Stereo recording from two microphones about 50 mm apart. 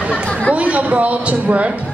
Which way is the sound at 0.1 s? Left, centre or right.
Left.